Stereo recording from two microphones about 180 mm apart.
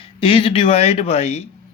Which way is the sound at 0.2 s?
30° left (ahead or behind).